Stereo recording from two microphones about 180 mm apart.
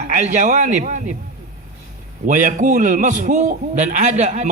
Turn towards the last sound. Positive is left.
turn(degrees=-40)  # may be behind; listen again after turning